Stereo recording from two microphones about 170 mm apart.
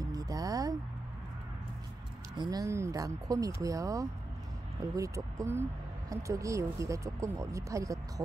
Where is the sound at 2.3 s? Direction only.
25° right (ahead or behind).